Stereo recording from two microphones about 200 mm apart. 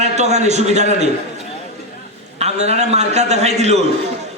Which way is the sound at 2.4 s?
35° right (ahead or behind).